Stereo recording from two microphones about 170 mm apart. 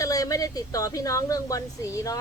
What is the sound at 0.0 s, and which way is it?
Speech, 20° left (ahead or behind).